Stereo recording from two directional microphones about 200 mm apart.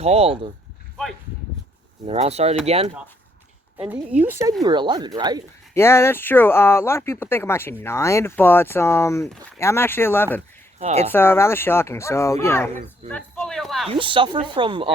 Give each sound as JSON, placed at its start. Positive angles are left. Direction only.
{"t": 0.0, "sound": "speech", "side_deg": -30}
{"t": 1.0, "sound": "speech", "side_deg": 5}
{"t": 2.0, "sound": "speech", "side_deg": -30}
{"t": 3.8, "sound": "a woman's voice", "side_deg": -5}
{"t": 4.6, "sound": "speech", "side_deg": -20}
{"t": 5.7, "sound": "speech", "side_deg": 10}
{"t": 10.8, "sound": "speech", "side_deg": -35}
{"t": 11.1, "sound": "speech", "side_deg": 10}
{"t": 13.8, "sound": "speech", "side_deg": -25}